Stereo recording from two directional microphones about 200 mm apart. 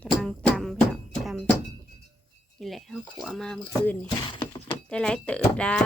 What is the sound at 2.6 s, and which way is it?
Speech, centre (ahead or behind).